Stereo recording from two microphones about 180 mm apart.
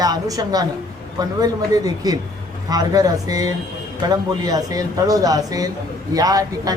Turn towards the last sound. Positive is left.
turn(degrees=-20)  # may be behind; listen again after turning